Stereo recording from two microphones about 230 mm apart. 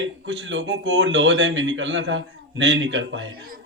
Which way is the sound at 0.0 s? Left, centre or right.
Right.